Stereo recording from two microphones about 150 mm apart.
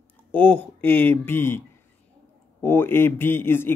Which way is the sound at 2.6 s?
15° left (ahead or behind).